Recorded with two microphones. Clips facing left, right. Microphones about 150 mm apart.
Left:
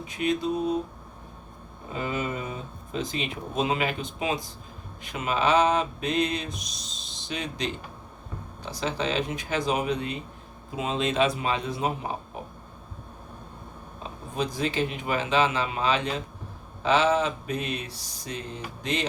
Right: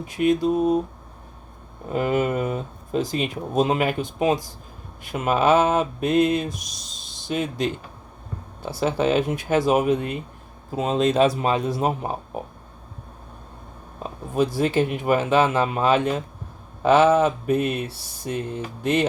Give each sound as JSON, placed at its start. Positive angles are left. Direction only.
{"t": 0.0, "sound": "speech", "side_deg": -50}
{"t": 1.9, "sound": "speech", "side_deg": -55}
{"t": 6.5, "sound": "rub", "side_deg": 0}
{"t": 7.3, "sound": "speech", "side_deg": -50}
{"t": 8.8, "sound": "speech", "side_deg": -50}
{"t": 14.6, "sound": "speech", "side_deg": -50}